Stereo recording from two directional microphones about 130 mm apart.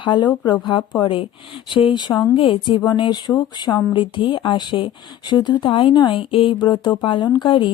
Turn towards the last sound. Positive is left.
turn(degrees=40)  # may be behind; listen again after turning